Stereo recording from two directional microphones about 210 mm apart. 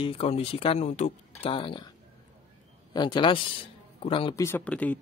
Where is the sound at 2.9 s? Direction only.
20° left (ahead or behind).